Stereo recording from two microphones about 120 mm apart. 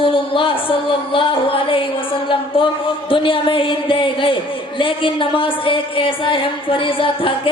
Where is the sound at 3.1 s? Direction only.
45° left (ahead or behind).